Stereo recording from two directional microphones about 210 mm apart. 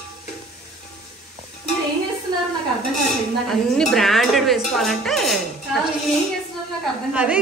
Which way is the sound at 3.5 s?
Centre (ahead or behind).